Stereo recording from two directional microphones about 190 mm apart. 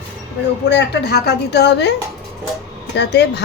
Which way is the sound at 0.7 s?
60° left (ahead or behind).